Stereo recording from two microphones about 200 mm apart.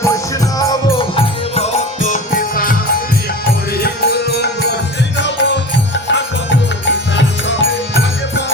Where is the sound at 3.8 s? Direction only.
50° left (ahead or behind).